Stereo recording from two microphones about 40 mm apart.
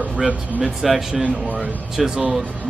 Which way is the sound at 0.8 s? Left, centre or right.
Centre.